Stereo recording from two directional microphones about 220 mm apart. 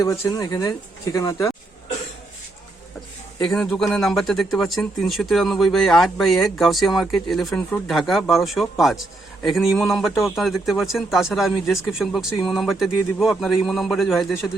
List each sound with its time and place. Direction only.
0.0 s speech: 15° left (ahead or behind)
3.4 s speech: 5° left (ahead or behind)